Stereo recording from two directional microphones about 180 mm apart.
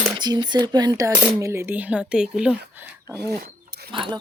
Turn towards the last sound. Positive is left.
turn(degrees=-30)  # may be behind; listen again after turning